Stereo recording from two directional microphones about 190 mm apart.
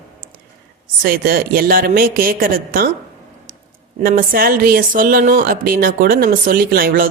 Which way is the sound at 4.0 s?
50° right (ahead or behind).